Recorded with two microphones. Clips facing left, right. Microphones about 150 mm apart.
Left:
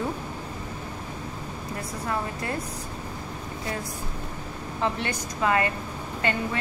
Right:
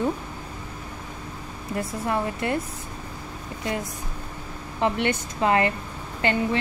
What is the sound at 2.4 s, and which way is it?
Speech, 25° right (ahead or behind).